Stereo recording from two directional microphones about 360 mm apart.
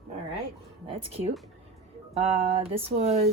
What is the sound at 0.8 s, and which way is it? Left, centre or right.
Speech, centre.